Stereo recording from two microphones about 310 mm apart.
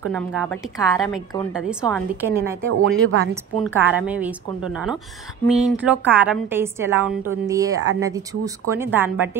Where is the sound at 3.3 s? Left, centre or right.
Centre.